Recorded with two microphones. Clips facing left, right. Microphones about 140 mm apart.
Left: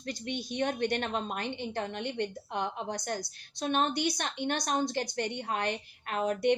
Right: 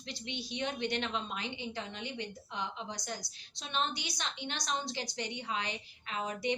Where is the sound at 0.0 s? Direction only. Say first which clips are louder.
Left 6 dB; 50° left (ahead or behind).